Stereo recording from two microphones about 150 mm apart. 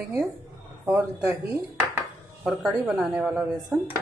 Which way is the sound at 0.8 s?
15° right (ahead or behind).